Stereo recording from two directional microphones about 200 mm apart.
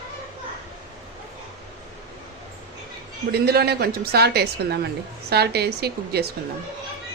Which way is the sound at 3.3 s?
50° right (ahead or behind).